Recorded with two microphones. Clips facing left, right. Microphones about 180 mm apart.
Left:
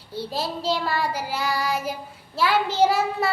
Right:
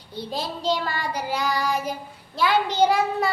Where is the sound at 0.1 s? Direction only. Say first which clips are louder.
Left 2 dB; 5° left (ahead or behind).